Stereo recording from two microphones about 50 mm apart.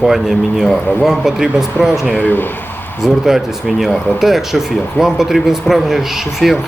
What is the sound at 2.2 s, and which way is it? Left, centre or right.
Speech, left.